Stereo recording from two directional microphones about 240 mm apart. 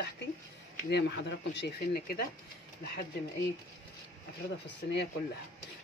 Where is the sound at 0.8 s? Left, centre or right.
Left.